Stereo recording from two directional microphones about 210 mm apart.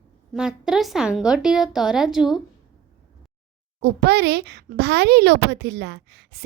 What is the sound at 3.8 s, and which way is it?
Speech, 50° right (ahead or behind).